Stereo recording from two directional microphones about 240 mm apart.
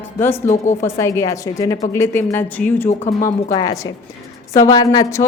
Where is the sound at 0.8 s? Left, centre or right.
Centre.